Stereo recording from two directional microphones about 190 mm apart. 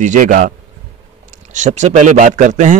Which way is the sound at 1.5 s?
40° right (ahead or behind).